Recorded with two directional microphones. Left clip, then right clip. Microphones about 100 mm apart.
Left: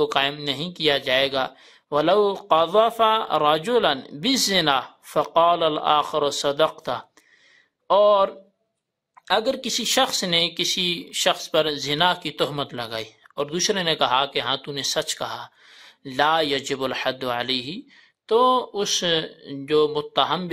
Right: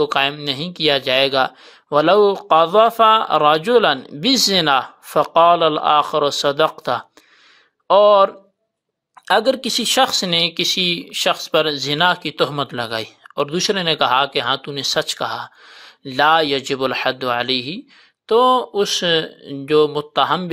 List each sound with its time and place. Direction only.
0.0 s speech: 30° right (ahead or behind)
9.2 s speech: 55° right (ahead or behind); by 12.6 s 30° right (ahead or behind)
12.6 s speech: 45° right (ahead or behind)